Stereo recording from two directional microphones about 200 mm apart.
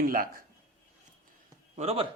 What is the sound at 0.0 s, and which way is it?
Speech, 45° right (ahead or behind).